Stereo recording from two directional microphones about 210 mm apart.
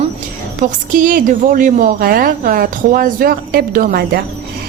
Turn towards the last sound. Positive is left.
turn(degrees=-45)  # may be behind; listen again after turning